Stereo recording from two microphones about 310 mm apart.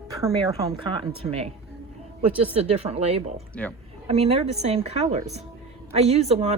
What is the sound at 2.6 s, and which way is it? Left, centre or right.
A woman's voice, centre.